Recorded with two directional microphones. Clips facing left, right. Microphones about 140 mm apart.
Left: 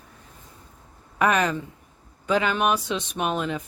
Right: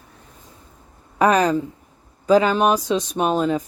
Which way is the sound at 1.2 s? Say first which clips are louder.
Right 5 dB; 35° right (ahead or behind).